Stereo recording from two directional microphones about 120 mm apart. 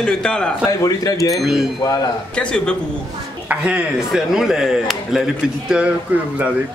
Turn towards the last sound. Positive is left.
turn(degrees=-10)  # may be behind; listen again after turning